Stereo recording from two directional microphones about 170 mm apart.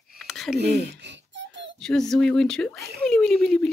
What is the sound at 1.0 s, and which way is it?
Giggle, 90° right.